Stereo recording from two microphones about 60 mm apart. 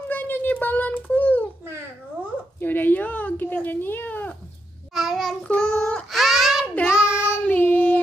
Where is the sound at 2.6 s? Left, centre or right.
Left.